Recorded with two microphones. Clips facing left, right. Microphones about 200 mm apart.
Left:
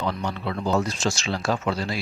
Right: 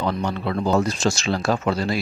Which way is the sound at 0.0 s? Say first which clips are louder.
Right 4 dB; 50° right (ahead or behind).